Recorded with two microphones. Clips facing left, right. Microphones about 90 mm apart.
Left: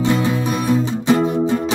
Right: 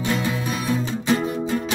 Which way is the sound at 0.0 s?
25° left (ahead or behind).